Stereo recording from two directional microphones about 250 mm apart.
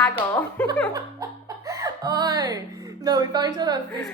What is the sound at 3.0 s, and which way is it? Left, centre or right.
Speech, centre.